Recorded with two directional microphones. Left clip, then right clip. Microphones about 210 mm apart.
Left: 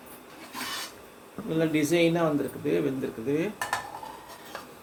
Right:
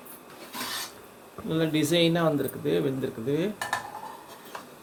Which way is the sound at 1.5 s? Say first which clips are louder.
Even; 15° right (ahead or behind).